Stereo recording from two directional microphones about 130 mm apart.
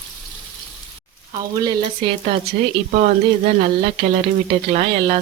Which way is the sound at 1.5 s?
30° right (ahead or behind).